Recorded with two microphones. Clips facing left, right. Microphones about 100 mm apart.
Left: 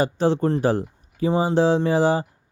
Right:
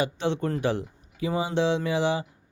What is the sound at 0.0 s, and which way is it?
Speech, 40° left (ahead or behind).